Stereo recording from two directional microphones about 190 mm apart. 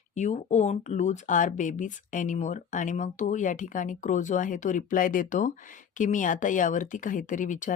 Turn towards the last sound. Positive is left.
turn(degrees=40)  # may be behind; listen again after turning